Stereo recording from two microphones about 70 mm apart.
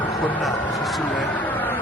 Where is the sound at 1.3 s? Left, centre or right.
Left.